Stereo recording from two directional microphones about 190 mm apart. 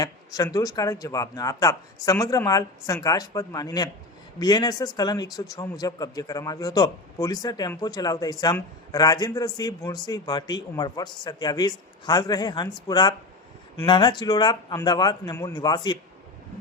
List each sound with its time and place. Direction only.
0.0 s a man's voice: 20° left (ahead or behind)